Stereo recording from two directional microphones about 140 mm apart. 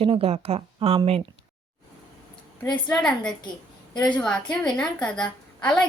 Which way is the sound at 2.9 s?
5° left (ahead or behind).